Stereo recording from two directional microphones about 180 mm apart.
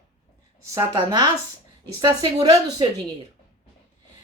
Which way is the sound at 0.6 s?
15° right (ahead or behind).